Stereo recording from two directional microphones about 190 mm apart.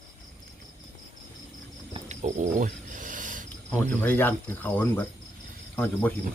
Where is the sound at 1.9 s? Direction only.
40° right (ahead or behind).